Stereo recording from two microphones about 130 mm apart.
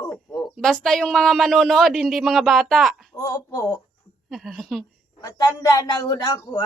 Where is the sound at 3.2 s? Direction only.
25° left (ahead or behind).